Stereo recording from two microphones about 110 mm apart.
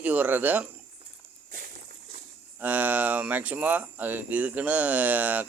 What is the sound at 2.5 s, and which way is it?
Speech, 15° right (ahead or behind).